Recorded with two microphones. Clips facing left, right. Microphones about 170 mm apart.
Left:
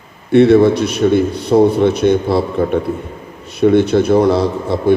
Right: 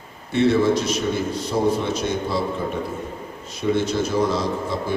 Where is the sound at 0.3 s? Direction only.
60° left (ahead or behind).